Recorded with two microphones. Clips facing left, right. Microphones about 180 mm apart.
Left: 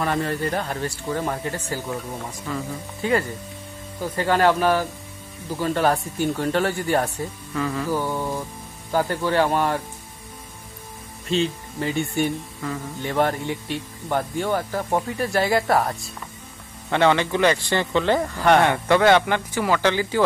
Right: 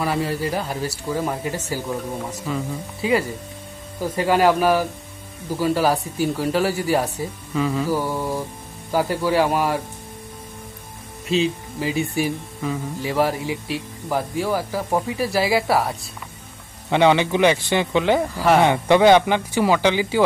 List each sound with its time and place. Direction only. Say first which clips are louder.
0.0 s speech: right 1 dB; 5° right (ahead or behind)
11.2 s speech: right 2 dB; 5° right (ahead or behind)
16.9 s speech: right 3 dB; 15° right (ahead or behind)
18.7 s speech: right 3 dB; 15° right (ahead or behind)